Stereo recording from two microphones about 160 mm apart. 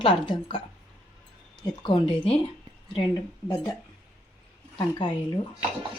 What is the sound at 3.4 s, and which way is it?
Speech, 20° left (ahead or behind).